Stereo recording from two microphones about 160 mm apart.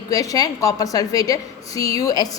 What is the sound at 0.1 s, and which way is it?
A woman's voice, 20° left (ahead or behind).